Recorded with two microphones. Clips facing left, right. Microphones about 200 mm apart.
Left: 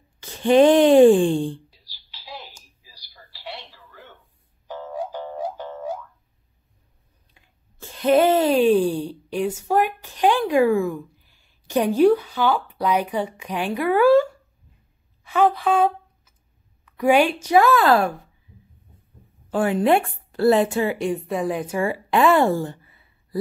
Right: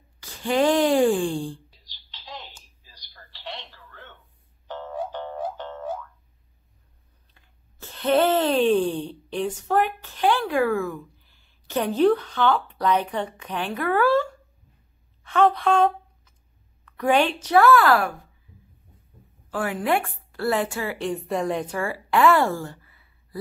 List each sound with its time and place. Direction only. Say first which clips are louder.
0.2 s speech: left 7 dB; 20° left (ahead or behind)
1.9 s a sound: left 1 dB; 10° left (ahead or behind)
4.6 s music: left 1 dB; 10° left (ahead or behind)
7.3 s speech: left 2 dB; 15° left (ahead or behind)
15.2 s a sound: left 1 dB; 5° left (ahead or behind)
16.8 s a woman's voice: left 3 dB; 10° left (ahead or behind)
19.5 s speech: left 6 dB; 25° left (ahead or behind)
21.0 s a woman's voice: left 2 dB; 5° left (ahead or behind)
21.7 s a woman's voice: left 5 dB; 20° left (ahead or behind)